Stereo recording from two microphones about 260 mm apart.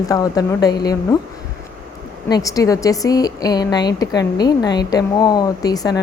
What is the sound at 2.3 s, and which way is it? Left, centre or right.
A woman's voice, centre.